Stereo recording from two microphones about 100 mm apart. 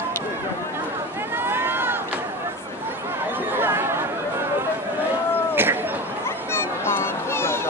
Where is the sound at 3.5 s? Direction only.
20° right (ahead or behind).